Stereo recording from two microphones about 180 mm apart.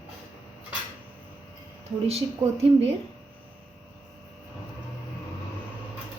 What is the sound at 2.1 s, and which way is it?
Speech, 35° right (ahead or behind).